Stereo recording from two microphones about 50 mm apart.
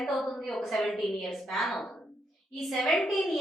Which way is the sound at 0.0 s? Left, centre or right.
Centre.